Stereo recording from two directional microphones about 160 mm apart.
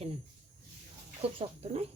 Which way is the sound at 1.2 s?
40° right (ahead or behind).